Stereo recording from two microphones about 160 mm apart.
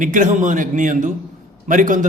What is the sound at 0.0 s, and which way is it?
A man's voice, 55° right (ahead or behind).